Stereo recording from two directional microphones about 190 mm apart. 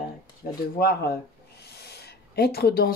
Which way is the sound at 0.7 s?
55° left (ahead or behind).